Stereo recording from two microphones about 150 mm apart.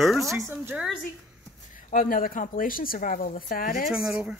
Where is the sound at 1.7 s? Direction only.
65° left (ahead or behind).